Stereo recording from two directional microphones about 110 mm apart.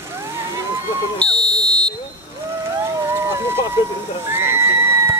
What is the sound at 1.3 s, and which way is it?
Smoke detector, 10° left (ahead or behind).